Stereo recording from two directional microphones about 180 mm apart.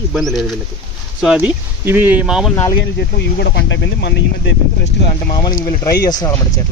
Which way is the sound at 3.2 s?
65° left (ahead or behind).